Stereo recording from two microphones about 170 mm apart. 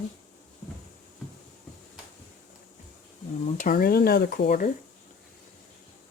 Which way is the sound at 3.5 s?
55° left (ahead or behind).